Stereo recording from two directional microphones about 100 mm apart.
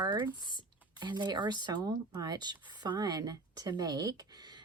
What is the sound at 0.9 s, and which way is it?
Speech, 50° right (ahead or behind).